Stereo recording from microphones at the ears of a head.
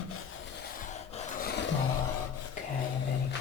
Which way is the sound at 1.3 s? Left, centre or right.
Left.